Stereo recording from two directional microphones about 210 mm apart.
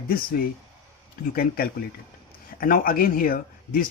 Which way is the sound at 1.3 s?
45° left (ahead or behind).